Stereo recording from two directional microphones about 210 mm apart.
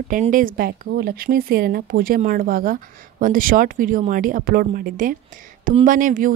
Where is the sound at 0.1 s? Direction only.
40° right (ahead or behind).